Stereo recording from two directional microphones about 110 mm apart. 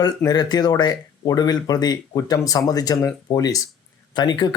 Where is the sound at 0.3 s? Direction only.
35° left (ahead or behind).